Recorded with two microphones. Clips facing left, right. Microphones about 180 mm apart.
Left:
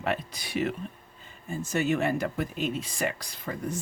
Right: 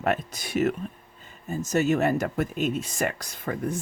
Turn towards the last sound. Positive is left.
turn(degrees=-50)  # may be behind; listen again after turning